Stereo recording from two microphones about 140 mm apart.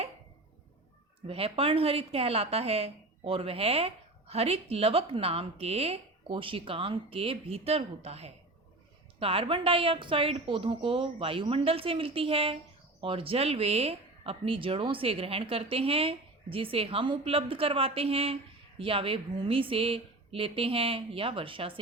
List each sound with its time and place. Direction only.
1.3 s a woman's voice: 45° right (ahead or behind)